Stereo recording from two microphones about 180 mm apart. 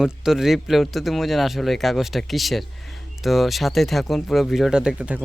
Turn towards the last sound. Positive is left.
turn(degrees=-10)  # may be behind; listen again after turning